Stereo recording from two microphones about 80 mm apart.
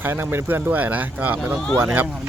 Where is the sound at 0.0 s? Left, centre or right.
Right.